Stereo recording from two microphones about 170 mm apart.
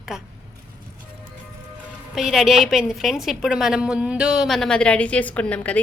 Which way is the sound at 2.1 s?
Centre (ahead or behind).